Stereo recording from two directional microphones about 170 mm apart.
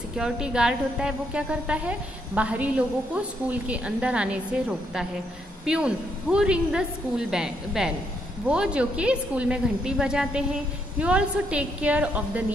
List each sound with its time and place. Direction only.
0.1 s a woman's voice: 5° right (ahead or behind)